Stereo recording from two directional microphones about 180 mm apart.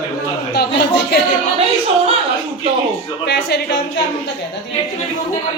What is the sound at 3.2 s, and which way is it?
Speech, 65° left (ahead or behind).